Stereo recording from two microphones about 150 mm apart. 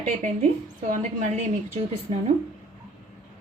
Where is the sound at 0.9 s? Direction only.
50° right (ahead or behind).